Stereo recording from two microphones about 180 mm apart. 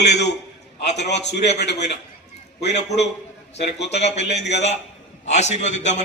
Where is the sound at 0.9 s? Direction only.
70° left (ahead or behind).